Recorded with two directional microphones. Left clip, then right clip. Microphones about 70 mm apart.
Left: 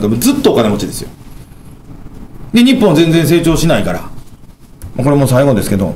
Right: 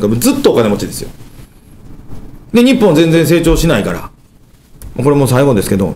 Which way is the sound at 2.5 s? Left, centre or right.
Centre.